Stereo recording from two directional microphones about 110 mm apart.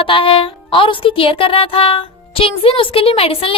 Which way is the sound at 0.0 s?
55° left (ahead or behind).